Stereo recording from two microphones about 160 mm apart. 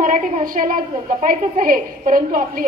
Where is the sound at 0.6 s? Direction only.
50° right (ahead or behind).